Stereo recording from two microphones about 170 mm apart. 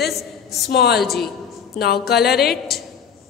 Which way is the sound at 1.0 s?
Centre (ahead or behind).